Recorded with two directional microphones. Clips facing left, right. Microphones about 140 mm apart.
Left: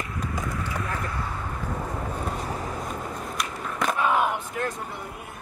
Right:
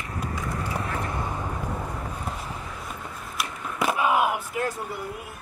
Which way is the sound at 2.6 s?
45° left (ahead or behind).